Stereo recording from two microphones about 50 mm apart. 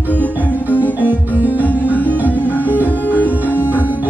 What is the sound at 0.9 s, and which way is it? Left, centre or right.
Music, right.